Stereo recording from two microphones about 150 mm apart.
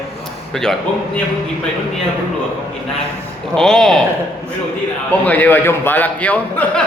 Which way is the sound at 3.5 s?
5° left (ahead or behind).